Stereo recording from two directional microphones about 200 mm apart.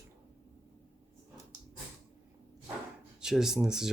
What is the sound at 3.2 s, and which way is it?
Speech, centre (ahead or behind).